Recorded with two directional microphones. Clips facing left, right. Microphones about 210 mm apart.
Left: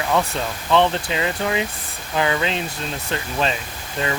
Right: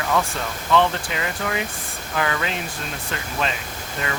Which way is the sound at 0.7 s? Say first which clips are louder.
Left 2 dB; 25° left (ahead or behind).